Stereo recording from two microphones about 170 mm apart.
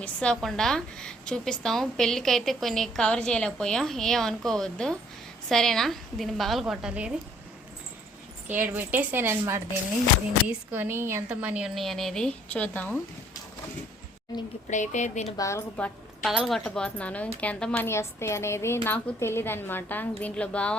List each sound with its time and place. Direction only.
0.0 s a woman's voice: 5° left (ahead or behind)
8.6 s a woman's voice: 10° right (ahead or behind); by 13.0 s 10° left (ahead or behind)
14.7 s a woman's voice: 45° left (ahead or behind)
15.4 s a woman's voice: 15° left (ahead or behind)
16.2 s a woman's voice: centre (ahead or behind)